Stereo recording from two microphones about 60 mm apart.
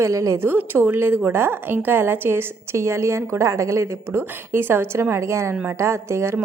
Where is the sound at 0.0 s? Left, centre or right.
Right.